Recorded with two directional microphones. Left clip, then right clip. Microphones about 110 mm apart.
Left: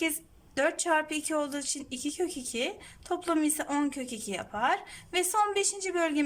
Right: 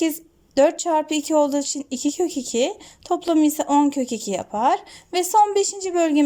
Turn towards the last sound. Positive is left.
turn(degrees=-45)  # may be behind; listen again after turning